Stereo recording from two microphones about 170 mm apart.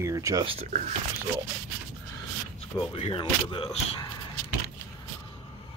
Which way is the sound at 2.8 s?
30° left (ahead or behind).